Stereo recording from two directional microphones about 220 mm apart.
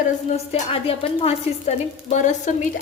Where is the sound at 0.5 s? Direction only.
25° left (ahead or behind).